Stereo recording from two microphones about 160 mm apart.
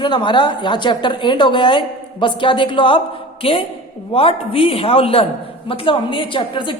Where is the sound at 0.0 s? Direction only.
30° left (ahead or behind).